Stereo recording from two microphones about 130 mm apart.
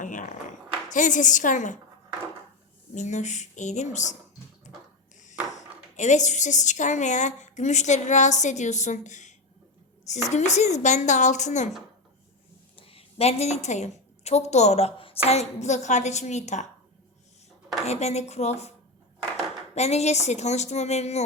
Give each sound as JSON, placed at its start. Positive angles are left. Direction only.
{"t": 0.0, "sound": "a sound", "side_deg": 75}
{"t": 0.9, "sound": "a woman's voice", "side_deg": 75}
{"t": 2.9, "sound": "a woman's voice", "side_deg": 65}
{"t": 5.5, "sound": "a woman's voice", "side_deg": 65}
{"t": 12.7, "sound": "a woman's voice", "side_deg": 45}
{"t": 17.8, "sound": "a woman's voice", "side_deg": 55}
{"t": 19.7, "sound": "a woman's voice", "side_deg": 55}